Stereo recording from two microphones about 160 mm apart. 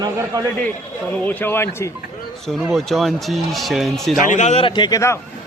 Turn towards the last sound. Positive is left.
turn(degrees=20)  # may be behind; listen again after turning